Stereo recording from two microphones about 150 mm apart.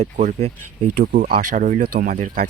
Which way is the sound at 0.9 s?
65° right (ahead or behind).